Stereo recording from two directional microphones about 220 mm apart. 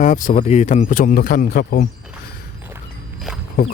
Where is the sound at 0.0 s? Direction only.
35° left (ahead or behind).